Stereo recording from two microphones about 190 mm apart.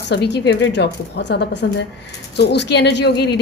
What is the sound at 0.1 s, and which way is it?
A woman's voice, 60° left (ahead or behind).